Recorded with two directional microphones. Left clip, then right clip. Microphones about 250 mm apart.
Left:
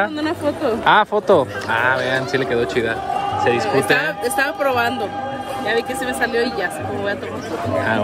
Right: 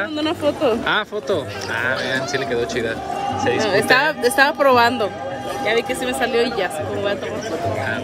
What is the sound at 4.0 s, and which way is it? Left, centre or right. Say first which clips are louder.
Speech: right 4 dB; right.